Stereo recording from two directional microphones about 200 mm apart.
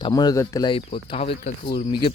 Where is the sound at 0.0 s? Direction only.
20° left (ahead or behind).